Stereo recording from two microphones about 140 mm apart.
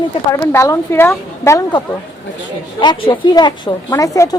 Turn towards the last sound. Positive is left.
turn(degrees=20)  # may be behind; listen again after turning